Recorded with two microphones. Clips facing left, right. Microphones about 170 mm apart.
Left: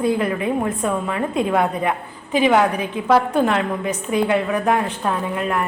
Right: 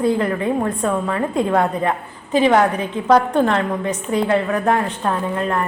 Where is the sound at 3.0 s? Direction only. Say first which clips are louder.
Right 2 dB; 5° left (ahead or behind).